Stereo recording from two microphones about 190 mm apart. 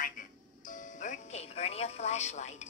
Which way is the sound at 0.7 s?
40° left (ahead or behind).